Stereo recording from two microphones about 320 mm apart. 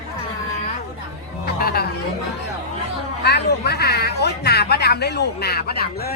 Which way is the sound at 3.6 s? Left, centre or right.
Left.